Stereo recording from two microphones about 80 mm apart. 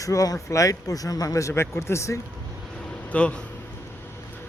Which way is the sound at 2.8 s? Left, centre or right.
Centre.